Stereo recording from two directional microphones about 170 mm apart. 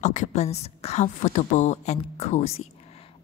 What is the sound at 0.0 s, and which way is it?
A woman's voice, 45° left (ahead or behind).